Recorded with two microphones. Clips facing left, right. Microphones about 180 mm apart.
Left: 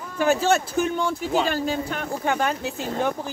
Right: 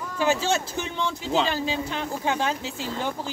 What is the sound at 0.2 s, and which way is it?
Speech, 55° left (ahead or behind).